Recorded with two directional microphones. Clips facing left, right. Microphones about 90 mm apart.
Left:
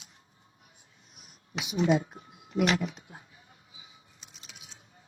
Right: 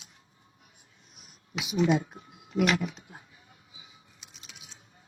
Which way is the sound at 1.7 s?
30° left (ahead or behind).